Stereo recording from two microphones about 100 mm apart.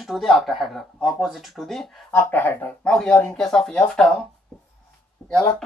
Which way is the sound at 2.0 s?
20° left (ahead or behind).